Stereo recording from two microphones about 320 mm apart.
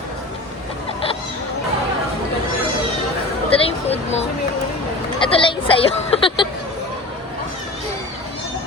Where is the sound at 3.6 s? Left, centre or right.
Centre.